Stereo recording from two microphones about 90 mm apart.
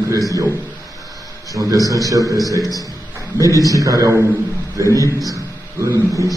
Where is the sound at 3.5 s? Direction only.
40° left (ahead or behind).